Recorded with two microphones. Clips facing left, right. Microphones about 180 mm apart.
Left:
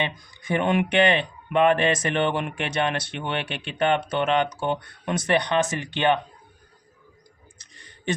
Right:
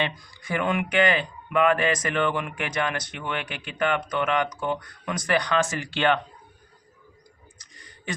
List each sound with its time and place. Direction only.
0.0 s speech: 25° left (ahead or behind)